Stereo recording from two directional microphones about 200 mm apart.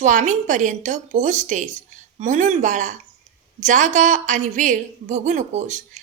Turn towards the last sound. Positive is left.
turn(degrees=-35)  # may be behind; listen again after turning